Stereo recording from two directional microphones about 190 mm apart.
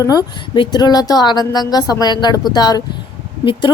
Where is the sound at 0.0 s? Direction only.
20° left (ahead or behind).